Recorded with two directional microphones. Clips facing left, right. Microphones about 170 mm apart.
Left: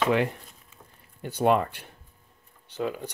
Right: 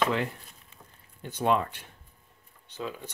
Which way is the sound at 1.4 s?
55° left (ahead or behind).